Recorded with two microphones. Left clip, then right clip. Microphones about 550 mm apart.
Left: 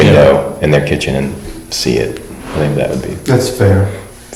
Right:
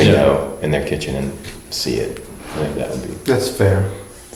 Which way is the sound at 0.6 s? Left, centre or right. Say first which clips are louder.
Left 8 dB; left.